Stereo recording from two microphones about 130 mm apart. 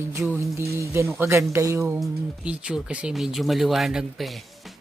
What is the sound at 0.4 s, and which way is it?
Speech, 25° right (ahead or behind).